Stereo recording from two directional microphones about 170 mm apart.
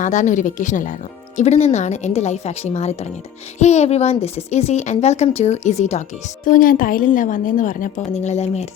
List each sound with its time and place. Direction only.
0.0 s a woman's voice: 45° left (ahead or behind)